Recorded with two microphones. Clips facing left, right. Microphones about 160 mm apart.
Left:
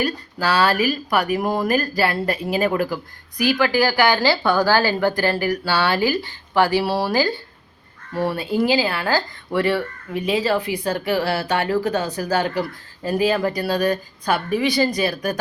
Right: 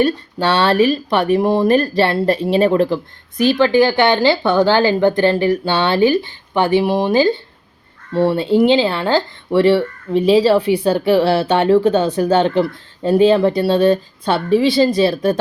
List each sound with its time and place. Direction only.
0.0 s speech: 30° right (ahead or behind)